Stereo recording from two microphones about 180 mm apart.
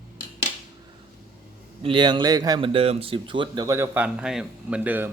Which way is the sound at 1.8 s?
25° right (ahead or behind).